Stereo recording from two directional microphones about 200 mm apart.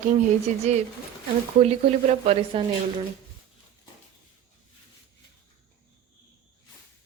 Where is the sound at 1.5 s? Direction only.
30° right (ahead or behind).